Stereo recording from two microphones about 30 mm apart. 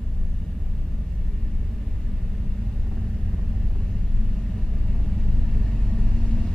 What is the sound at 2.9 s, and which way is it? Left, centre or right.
Vehicle, centre.